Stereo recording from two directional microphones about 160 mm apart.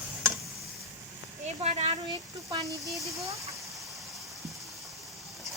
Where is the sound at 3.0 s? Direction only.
20° right (ahead or behind).